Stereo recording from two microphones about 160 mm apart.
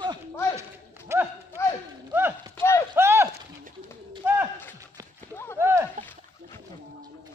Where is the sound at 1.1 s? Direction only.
15° right (ahead or behind).